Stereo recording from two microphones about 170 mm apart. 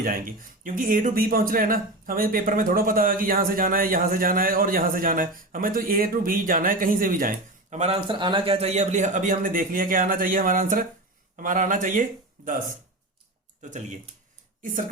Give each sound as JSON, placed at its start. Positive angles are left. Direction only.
{"t": 0.0, "sound": "speech", "side_deg": -55}
{"t": 8.0, "sound": "speech", "side_deg": -25}
{"t": 13.6, "sound": "speech", "side_deg": -45}